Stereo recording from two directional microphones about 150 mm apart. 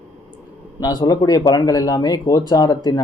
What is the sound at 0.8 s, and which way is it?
Speech, 25° left (ahead or behind).